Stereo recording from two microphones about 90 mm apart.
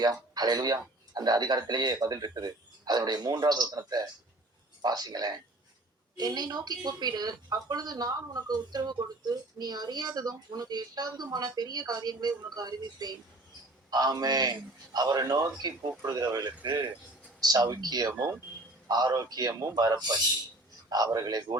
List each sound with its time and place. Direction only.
0.0 s speech: 45° right (ahead or behind)